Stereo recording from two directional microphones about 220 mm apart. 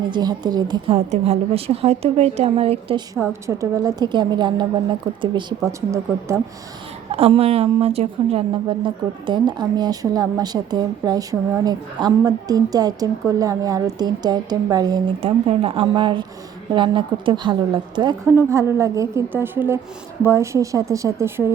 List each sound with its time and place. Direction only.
0.1 s speech: 20° right (ahead or behind)
3.2 s speech: 10° right (ahead or behind)
7.2 s speech: 25° right (ahead or behind)